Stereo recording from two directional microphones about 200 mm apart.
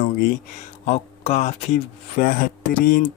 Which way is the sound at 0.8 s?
35° left (ahead or behind).